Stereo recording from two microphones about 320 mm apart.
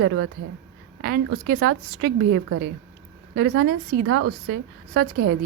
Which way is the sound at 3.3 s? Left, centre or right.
Right.